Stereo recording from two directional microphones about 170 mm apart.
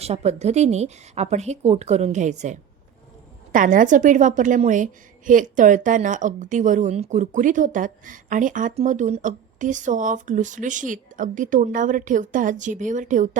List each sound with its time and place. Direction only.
0.0 s a woman's voice: 40° right (ahead or behind)
3.5 s a woman's voice: 50° right (ahead or behind)